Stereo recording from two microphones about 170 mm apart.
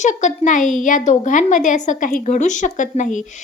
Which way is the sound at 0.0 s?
45° left (ahead or behind).